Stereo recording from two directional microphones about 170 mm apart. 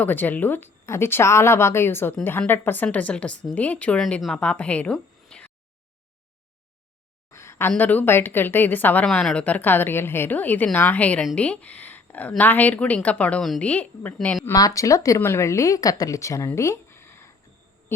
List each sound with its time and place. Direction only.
0.0 s a woman's voice: 10° left (ahead or behind)
7.3 s a sound: 15° left (ahead or behind)
7.7 s a woman's voice: 10° left (ahead or behind)
14.5 s a woman's voice: 20° left (ahead or behind)